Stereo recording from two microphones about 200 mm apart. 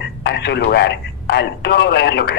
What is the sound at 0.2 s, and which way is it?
Speech, 55° left (ahead or behind).